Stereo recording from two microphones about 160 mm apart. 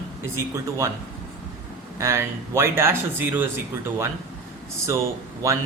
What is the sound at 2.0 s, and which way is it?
Speech, 15° right (ahead or behind).